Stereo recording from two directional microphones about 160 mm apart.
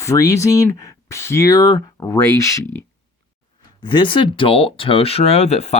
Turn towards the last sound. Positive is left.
turn(degrees=40)  # may be behind; listen again after turning